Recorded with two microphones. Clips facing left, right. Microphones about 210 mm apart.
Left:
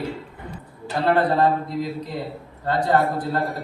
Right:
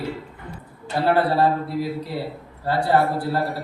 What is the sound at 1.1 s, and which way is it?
A man's voice, 10° right (ahead or behind).